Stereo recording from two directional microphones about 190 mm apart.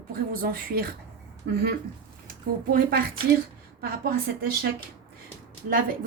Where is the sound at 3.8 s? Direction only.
55° right (ahead or behind).